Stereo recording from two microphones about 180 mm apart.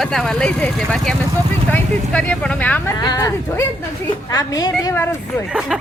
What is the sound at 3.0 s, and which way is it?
Speech, 20° left (ahead or behind).